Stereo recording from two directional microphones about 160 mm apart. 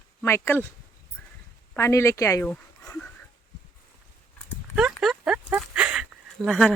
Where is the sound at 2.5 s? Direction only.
10° left (ahead or behind).